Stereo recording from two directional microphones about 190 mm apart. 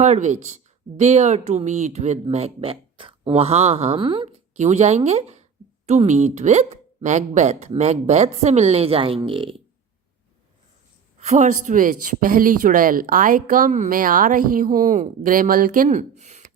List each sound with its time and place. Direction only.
0.0 s speech: 40° right (ahead or behind)
11.2 s speech: 35° right (ahead or behind)